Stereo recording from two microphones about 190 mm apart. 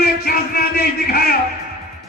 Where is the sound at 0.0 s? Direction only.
55° left (ahead or behind).